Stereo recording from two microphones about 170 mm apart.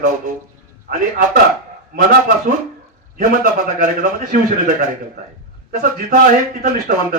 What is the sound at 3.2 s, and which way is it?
A man's voice, 50° right (ahead or behind).